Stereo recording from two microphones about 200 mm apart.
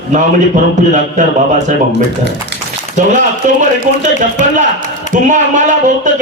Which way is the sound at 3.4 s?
40° right (ahead or behind).